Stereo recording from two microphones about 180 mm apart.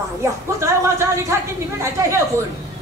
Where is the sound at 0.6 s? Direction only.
15° right (ahead or behind).